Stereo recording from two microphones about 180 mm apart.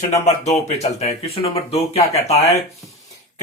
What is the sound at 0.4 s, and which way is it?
Speech, 35° left (ahead or behind).